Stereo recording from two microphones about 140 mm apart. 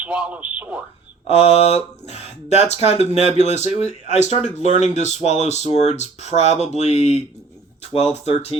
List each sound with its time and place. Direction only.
0.0 s speech: 10° right (ahead or behind)
1.3 s speech: 50° left (ahead or behind)